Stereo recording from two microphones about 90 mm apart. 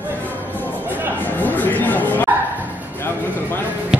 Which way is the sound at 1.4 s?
20° left (ahead or behind).